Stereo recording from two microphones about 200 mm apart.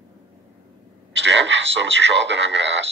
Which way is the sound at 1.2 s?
60° right (ahead or behind).